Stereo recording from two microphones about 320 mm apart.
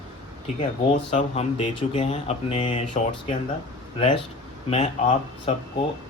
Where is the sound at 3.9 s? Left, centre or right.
Centre.